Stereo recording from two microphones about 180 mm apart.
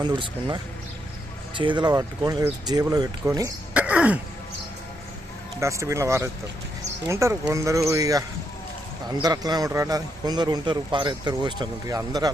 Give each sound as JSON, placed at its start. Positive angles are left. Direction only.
{"t": 0.0, "sound": "a man's voice", "side_deg": -25}
{"t": 3.8, "sound": "throat clearing", "side_deg": -5}
{"t": 5.5, "sound": "a man's voice", "side_deg": -15}